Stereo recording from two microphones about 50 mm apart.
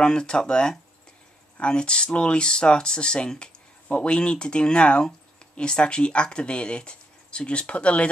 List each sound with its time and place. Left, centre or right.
0.0 s speech: centre